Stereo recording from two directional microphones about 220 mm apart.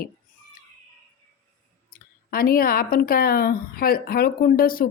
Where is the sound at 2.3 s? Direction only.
40° left (ahead or behind).